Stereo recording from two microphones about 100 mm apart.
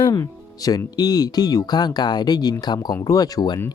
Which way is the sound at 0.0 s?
40° left (ahead or behind).